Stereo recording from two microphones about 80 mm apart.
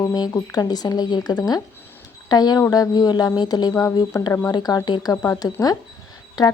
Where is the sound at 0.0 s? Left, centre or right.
Left.